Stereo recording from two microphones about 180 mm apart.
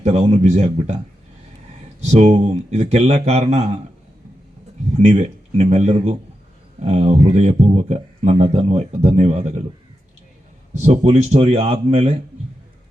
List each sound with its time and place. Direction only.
0.0 s speech: 35° right (ahead or behind)
2.0 s speech: 35° right (ahead or behind)
4.9 s speech: 35° right (ahead or behind)
10.8 s speech: 40° right (ahead or behind)